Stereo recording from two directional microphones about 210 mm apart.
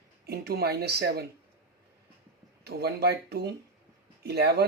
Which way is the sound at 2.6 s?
50° right (ahead or behind).